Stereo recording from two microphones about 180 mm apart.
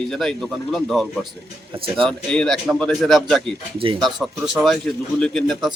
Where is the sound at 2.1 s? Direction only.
5° left (ahead or behind).